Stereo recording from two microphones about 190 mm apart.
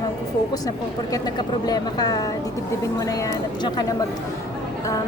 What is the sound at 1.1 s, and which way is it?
A woman's voice, 20° left (ahead or behind).